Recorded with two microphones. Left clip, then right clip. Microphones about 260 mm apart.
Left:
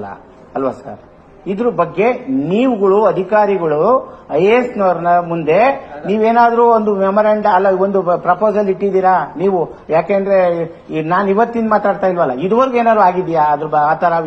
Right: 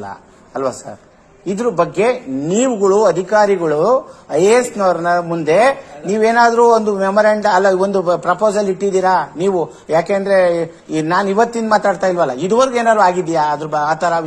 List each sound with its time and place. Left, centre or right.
1.6 s a man's voice: right